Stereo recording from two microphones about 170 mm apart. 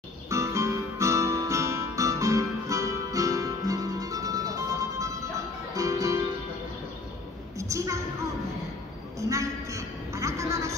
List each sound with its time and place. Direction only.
0.3 s guitar: 15° right (ahead or behind)
5.8 s music: 20° right (ahead or behind)
7.5 s a sound: 20° right (ahead or behind)
9.2 s music: 20° right (ahead or behind)